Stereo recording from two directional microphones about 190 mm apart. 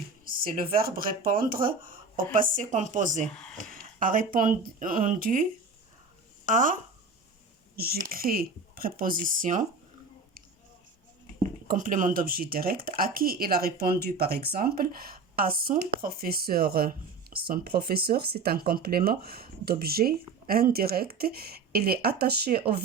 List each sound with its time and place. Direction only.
0.3 s a woman's voice: 50° right (ahead or behind)
11.4 s speech: 45° right (ahead or behind)